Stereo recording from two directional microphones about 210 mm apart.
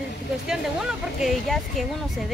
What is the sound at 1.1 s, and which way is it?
Speech, centre (ahead or behind).